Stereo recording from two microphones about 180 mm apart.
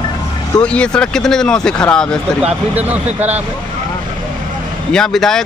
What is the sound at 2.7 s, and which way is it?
Speech, 10° right (ahead or behind).